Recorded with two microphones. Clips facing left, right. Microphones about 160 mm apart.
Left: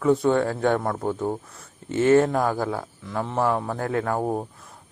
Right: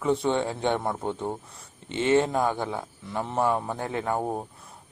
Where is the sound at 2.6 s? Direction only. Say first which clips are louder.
Left 4 dB; centre (ahead or behind).